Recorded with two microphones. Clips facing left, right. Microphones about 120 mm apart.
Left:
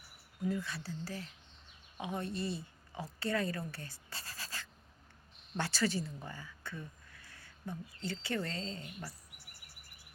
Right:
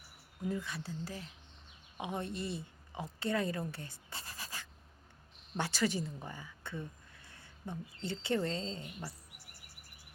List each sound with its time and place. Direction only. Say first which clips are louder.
0.4 s a woman's voice: left 1 dB; 15° right (ahead or behind)